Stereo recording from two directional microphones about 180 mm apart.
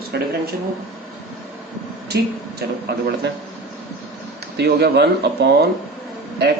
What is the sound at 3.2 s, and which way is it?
Speech, 70° right (ahead or behind).